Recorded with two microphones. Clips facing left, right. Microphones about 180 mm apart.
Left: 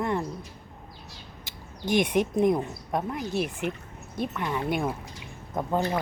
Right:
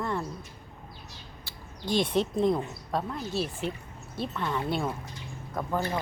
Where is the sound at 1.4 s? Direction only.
20° left (ahead or behind).